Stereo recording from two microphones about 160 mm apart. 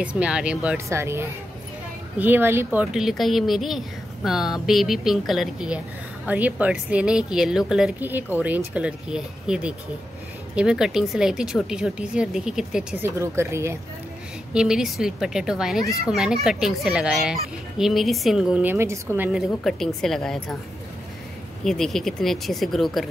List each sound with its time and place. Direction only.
0.0 s speech: 5° right (ahead or behind)
0.7 s speech: 15° right (ahead or behind)
13.2 s speech: 15° right (ahead or behind)
14.5 s speech: 5° right (ahead or behind)
15.8 s a child's voice: 20° left (ahead or behind)
16.1 s speech: centre (ahead or behind)
21.6 s speech: centre (ahead or behind)